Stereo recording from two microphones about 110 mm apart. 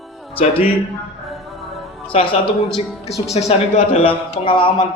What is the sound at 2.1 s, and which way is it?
A man's voice, 70° left (ahead or behind).